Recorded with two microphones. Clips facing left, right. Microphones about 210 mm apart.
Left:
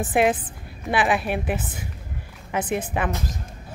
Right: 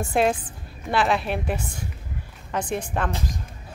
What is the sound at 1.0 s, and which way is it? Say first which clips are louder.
A woman's voice: left 1 dB; 5° left (ahead or behind).